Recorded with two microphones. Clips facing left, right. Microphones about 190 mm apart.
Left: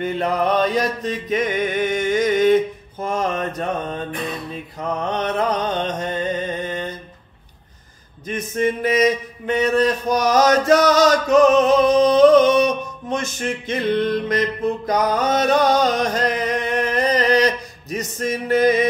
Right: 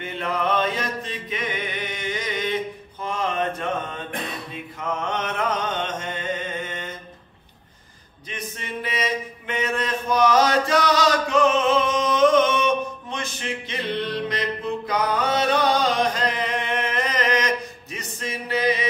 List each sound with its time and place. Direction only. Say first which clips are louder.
0.0 s chant: left 6 dB; 40° left (ahead or behind)
4.7 s a sound: left 4 dB; 35° left (ahead or behind)
8.3 s mantra: left 13 dB; 45° left (ahead or behind)